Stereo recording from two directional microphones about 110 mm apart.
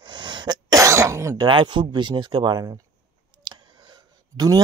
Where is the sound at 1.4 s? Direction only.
45° right (ahead or behind).